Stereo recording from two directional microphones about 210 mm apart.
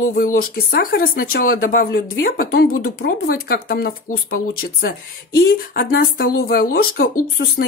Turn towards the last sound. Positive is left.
turn(degrees=45)  # may be behind; listen again after turning